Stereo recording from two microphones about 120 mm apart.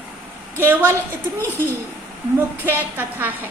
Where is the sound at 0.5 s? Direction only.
20° right (ahead or behind).